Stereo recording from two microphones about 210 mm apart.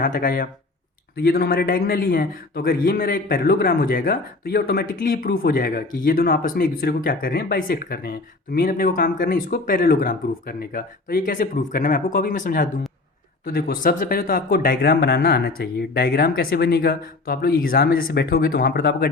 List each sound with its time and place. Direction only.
0.0 s speech: 40° left (ahead or behind)